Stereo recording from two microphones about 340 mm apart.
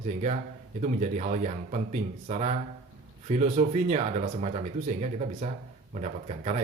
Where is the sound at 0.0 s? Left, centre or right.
Centre.